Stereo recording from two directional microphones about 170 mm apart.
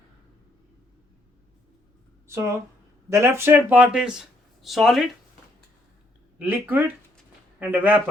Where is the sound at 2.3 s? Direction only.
15° right (ahead or behind); by 5.0 s centre (ahead or behind).